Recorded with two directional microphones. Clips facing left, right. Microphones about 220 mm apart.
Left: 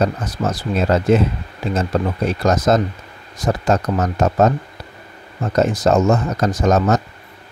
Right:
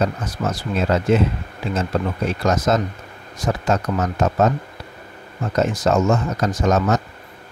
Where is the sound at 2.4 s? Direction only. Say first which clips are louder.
Left 3 dB; 35° left (ahead or behind).